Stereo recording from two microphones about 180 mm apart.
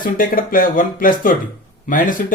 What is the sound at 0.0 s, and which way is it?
A man's voice, 50° left (ahead or behind).